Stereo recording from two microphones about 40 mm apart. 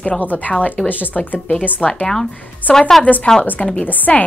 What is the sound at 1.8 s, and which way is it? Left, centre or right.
A woman's voice, left.